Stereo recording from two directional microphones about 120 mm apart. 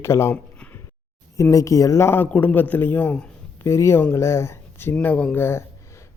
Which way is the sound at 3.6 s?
20° left (ahead or behind).